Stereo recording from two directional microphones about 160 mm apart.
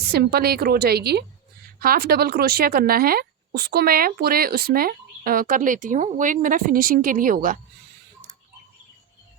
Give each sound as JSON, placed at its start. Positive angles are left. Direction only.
{"t": 0.1, "sound": "a woman's voice", "side_deg": -85}
{"t": 1.8, "sound": "speech", "side_deg": -70}